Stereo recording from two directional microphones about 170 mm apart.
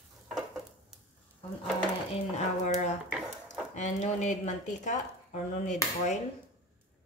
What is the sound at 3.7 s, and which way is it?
Speech, 45° left (ahead or behind).